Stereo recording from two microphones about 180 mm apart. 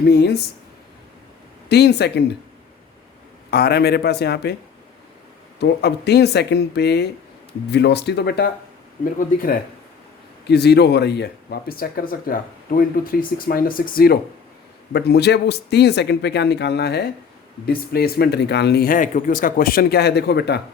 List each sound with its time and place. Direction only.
0.0 s speech: 65° left (ahead or behind)
1.7 s speech: 65° left (ahead or behind)
3.5 s speech: 60° left (ahead or behind)
5.5 s speech: 65° left (ahead or behind)
9.1 s speech: 55° left (ahead or behind)
10.4 s speech: 65° left (ahead or behind)
14.9 s speech: 65° left (ahead or behind)